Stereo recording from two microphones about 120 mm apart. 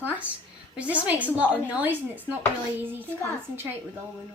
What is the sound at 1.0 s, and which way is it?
Speech, 15° right (ahead or behind).